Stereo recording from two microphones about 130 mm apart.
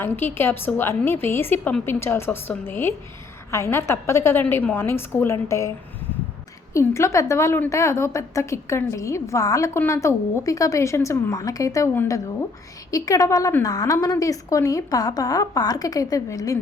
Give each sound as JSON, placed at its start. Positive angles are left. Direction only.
{"t": 0.0, "sound": "a woman's voice", "side_deg": 15}
{"t": 6.7, "sound": "a woman's voice", "side_deg": 20}